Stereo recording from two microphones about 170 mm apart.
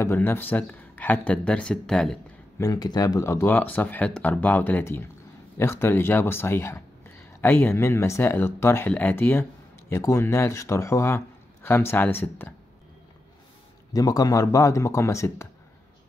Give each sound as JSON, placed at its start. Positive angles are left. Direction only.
{"t": 0.0, "sound": "speech", "side_deg": 15}
{"t": 2.6, "sound": "speech", "side_deg": 25}
{"t": 13.9, "sound": "speech", "side_deg": 20}